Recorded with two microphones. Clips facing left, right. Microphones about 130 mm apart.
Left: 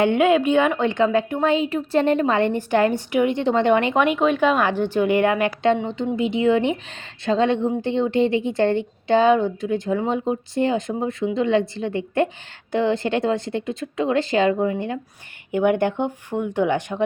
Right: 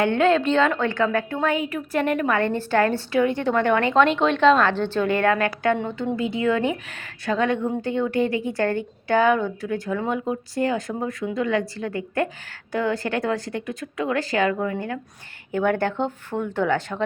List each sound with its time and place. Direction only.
0.0 s a woman's voice: 15° left (ahead or behind)